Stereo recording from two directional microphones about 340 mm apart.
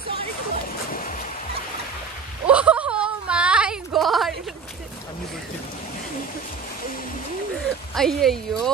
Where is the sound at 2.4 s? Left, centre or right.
Centre.